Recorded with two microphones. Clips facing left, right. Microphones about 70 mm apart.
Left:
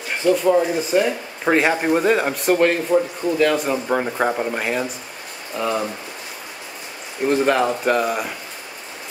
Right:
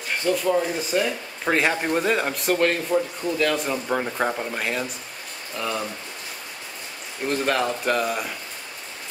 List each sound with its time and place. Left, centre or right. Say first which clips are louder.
0.1 s speech: left 5 dB; centre
5.6 s speech: left 6 dB; centre
7.2 s speech: left 6 dB; centre